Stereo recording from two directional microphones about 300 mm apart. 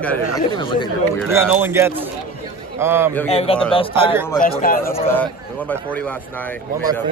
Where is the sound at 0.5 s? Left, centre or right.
Centre.